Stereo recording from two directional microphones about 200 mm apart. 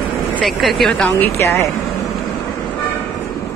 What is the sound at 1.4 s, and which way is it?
Speech, 15° left (ahead or behind).